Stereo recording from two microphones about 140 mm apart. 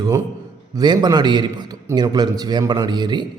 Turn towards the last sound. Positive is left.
turn(degrees=-30)  # may be behind; listen again after turning